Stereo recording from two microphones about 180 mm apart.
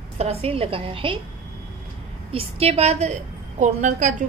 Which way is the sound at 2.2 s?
35° right (ahead or behind).